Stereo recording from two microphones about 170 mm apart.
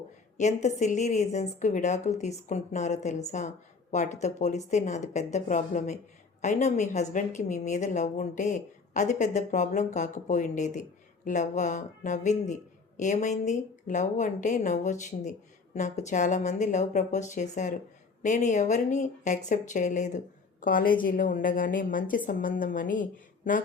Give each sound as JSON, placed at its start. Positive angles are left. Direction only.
{"t": 0.3, "sound": "a woman's voice", "side_deg": 45}